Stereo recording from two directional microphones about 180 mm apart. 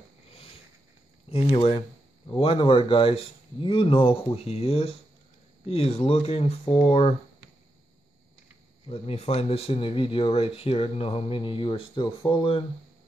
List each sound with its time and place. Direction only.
1.3 s speech: 35° left (ahead or behind)
8.8 s speech: 35° left (ahead or behind)